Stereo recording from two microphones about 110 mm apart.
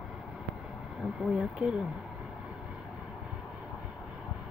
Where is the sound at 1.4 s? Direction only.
5° right (ahead or behind).